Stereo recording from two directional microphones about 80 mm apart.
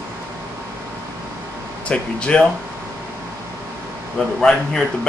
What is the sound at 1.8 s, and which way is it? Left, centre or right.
Speech, centre.